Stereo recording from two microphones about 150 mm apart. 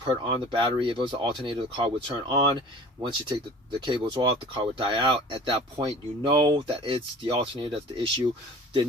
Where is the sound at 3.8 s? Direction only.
30° right (ahead or behind).